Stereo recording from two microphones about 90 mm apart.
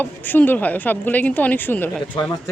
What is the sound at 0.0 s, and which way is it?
Speech, 20° left (ahead or behind).